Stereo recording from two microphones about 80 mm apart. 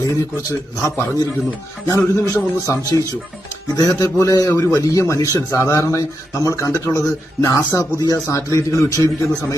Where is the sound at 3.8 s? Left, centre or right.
Left.